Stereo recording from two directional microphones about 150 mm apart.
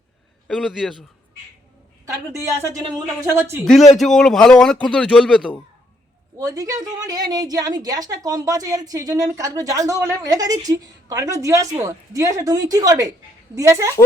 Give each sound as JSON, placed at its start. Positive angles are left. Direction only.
{"t": 0.4, "sound": "a man's voice", "side_deg": -5}
{"t": 2.3, "sound": "a woman's voice", "side_deg": -20}
{"t": 3.9, "sound": "a man's voice", "side_deg": 0}
{"t": 6.4, "sound": "a woman's voice", "side_deg": -25}